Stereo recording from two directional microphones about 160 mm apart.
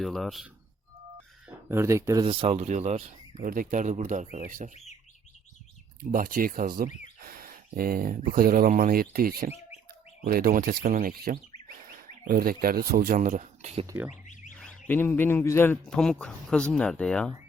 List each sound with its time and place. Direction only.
0.0 s speech: centre (ahead or behind)
1.5 s speech: 15° right (ahead or behind)
2.2 s speech: 35° right (ahead or behind)
3.4 s speech: 60° right (ahead or behind)
4.7 s speech: 45° left (ahead or behind)
6.0 s speech: 65° right (ahead or behind); by 13.8 s 50° right (ahead or behind)
13.8 s speech: 15° right (ahead or behind)
14.6 s speech: 10° left (ahead or behind)